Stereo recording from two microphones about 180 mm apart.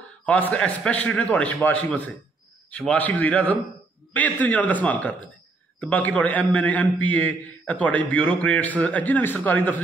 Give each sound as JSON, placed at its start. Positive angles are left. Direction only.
{"t": 0.2, "sound": "a man's voice", "side_deg": 10}